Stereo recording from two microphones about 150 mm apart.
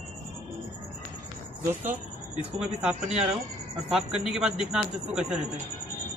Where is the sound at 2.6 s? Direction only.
5° right (ahead or behind).